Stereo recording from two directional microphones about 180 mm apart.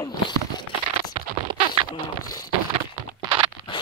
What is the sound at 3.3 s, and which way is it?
Crunch, 25° right (ahead or behind).